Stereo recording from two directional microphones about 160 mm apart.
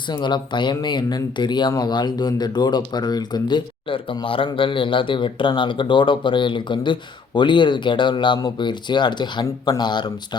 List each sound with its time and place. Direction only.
0.1 s speech: 30° left (ahead or behind)